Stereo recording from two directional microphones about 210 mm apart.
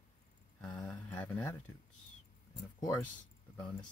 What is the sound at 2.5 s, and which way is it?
Speech, 15° left (ahead or behind).